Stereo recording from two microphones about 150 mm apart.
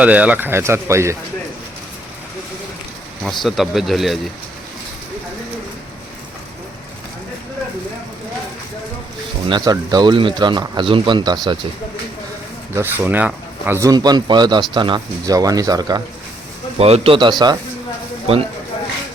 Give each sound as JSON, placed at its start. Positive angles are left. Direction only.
{"t": 0.0, "sound": "speech", "side_deg": -10}
{"t": 3.2, "sound": "speech", "side_deg": 0}
{"t": 9.5, "sound": "a man's voice", "side_deg": -25}
{"t": 12.7, "sound": "speech", "side_deg": -15}
{"t": 16.7, "sound": "a man's voice", "side_deg": -40}